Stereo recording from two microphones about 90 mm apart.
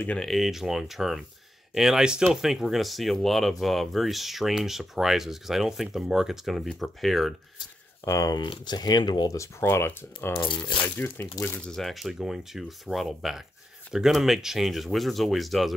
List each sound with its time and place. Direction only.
0.2 s speech: centre (ahead or behind)
8.0 s speech: 40° left (ahead or behind)
8.4 s speech: 60° left (ahead or behind)
9.3 s speech: 30° left (ahead or behind)
11.6 s speech: 5° left (ahead or behind)